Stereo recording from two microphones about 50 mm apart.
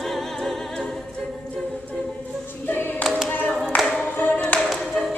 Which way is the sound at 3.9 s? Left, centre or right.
Left.